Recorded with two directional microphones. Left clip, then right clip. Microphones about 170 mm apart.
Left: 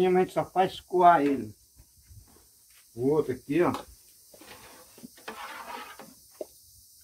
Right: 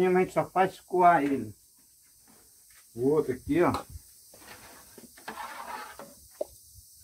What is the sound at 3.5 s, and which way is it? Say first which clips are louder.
Speech: right 1 dB; 25° left (ahead or behind).